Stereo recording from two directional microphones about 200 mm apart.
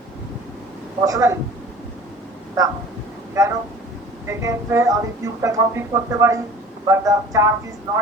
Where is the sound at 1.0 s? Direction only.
15° right (ahead or behind).